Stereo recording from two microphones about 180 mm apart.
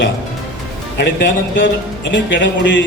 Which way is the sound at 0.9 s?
70° left (ahead or behind).